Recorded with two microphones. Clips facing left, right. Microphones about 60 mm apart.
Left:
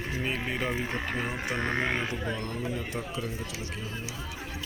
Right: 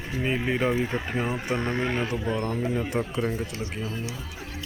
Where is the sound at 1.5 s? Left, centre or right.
Left.